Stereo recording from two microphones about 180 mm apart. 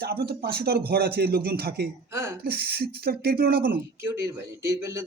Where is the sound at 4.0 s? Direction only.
15° right (ahead or behind).